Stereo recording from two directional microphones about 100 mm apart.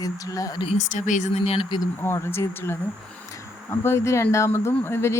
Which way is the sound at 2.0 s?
25° left (ahead or behind).